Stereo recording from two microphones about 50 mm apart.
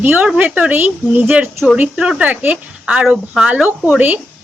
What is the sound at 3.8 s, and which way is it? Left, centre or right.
Speech, right.